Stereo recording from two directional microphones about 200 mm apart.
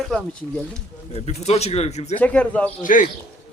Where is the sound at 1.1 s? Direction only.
30° left (ahead or behind).